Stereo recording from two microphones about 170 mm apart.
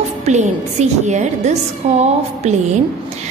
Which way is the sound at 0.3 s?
45° right (ahead or behind).